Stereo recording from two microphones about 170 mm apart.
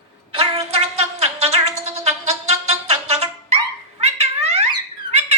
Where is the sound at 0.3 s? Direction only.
35° right (ahead or behind).